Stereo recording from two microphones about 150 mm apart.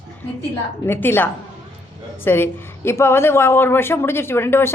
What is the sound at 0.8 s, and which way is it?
Speech, 15° left (ahead or behind).